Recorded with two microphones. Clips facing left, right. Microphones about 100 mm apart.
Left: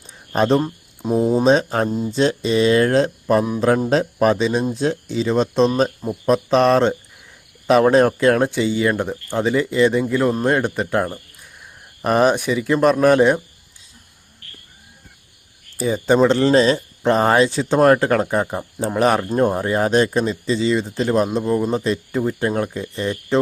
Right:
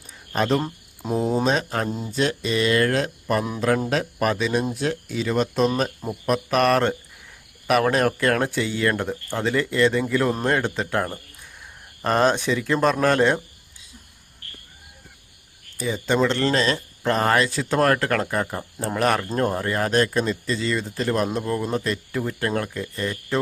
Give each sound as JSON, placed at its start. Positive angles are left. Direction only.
{"t": 0.3, "sound": "speech", "side_deg": 30}
{"t": 0.6, "sound": "cricket", "side_deg": 10}
{"t": 1.5, "sound": "speech", "side_deg": 30}
{"t": 1.9, "sound": "speech", "side_deg": 0}
{"t": 2.1, "sound": "speech", "side_deg": 30}
{"t": 15.8, "sound": "speech", "side_deg": 35}
{"t": 18.8, "sound": "speech", "side_deg": 5}
{"t": 20.5, "sound": "speech", "side_deg": 5}
{"t": 22.8, "sound": "speech", "side_deg": 25}